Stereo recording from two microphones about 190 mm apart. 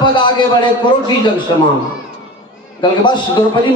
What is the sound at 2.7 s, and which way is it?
Speech, 25° left (ahead or behind).